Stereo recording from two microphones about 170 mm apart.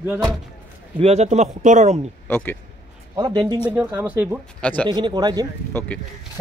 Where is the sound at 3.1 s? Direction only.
25° right (ahead or behind).